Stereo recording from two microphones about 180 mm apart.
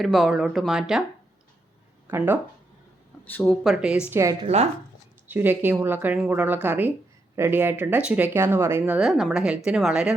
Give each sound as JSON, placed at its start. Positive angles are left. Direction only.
{"t": 0.0, "sound": "speech", "side_deg": 0}
{"t": 2.0, "sound": "speech", "side_deg": -10}
{"t": 3.2, "sound": "speech", "side_deg": 10}
{"t": 3.6, "sound": "speech", "side_deg": 0}
{"t": 4.1, "sound": "speech", "side_deg": -15}
{"t": 4.4, "sound": "speech", "side_deg": -35}
{"t": 5.3, "sound": "speech", "side_deg": -10}